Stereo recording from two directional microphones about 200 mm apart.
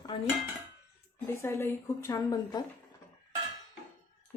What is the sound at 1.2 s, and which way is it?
Speech, 15° left (ahead or behind).